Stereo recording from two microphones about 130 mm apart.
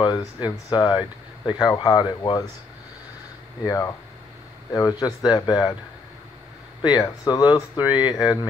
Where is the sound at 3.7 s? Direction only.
25° left (ahead or behind).